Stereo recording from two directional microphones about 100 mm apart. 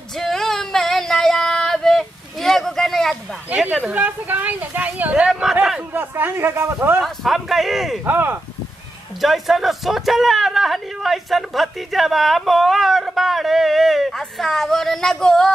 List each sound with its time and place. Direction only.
0.2 s a sound: 5° left (ahead or behind)
3.9 s speech: 15° right (ahead or behind)
5.9 s speech: 20° right (ahead or behind)
7.0 s a man's voice: centre (ahead or behind)
8.0 s speech: 20° right (ahead or behind)
9.2 s a man's voice: centre (ahead or behind)